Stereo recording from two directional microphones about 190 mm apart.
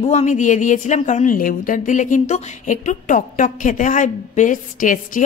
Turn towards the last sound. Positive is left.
turn(degrees=45)  # may be behind; listen again after turning